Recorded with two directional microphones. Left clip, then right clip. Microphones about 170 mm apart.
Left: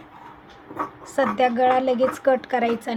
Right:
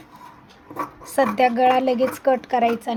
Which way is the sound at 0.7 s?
50° right (ahead or behind).